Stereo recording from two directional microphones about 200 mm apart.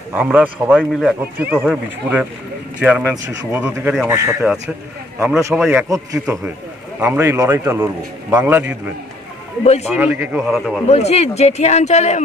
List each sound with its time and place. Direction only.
0.1 s speech: 10° right (ahead or behind)
0.7 s speech: centre (ahead or behind)
1.4 s speech: 10° right (ahead or behind)
7.0 s speech: 10° right (ahead or behind)
9.8 s speech: 5° right (ahead or behind)
10.9 s a man's voice: 30° left (ahead or behind)